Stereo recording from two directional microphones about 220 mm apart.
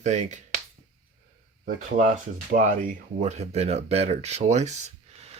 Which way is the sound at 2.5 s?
35° right (ahead or behind).